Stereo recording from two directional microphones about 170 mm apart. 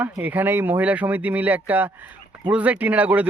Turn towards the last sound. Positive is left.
turn(degrees=-10)  # may be behind; listen again after turning